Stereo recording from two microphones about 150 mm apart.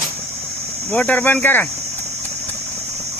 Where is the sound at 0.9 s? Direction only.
10° left (ahead or behind).